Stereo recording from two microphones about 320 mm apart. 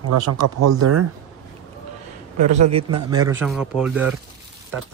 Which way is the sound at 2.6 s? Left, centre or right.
Centre.